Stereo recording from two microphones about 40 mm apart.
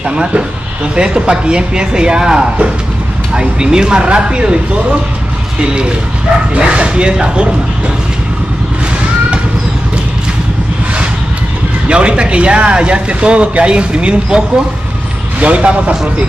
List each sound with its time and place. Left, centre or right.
0.1 s speech: right
6.6 s speech: right
11.9 s speech: right
15.4 s speech: right